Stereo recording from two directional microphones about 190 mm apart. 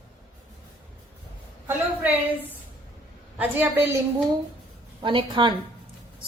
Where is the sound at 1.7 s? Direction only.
10° right (ahead or behind).